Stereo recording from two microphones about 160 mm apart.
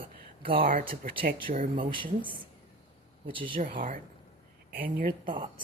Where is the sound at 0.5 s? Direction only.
60° right (ahead or behind).